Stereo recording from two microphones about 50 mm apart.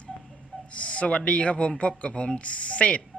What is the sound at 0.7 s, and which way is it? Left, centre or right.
Speech, left.